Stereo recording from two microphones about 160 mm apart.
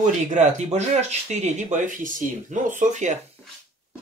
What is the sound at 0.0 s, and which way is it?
Speech, 50° right (ahead or behind).